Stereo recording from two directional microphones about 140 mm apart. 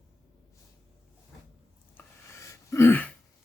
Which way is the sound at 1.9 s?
20° left (ahead or behind).